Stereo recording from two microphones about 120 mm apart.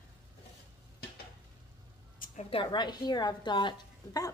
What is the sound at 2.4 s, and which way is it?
A woman's voice, 45° left (ahead or behind).